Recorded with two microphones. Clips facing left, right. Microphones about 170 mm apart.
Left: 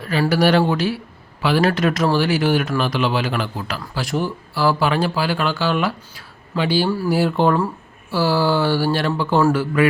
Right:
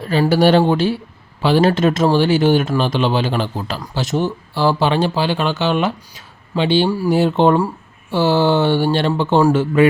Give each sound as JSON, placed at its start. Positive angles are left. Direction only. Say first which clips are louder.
{"t": 0.0, "sound": "speech", "louder": "right 3 dB", "side_deg": -25}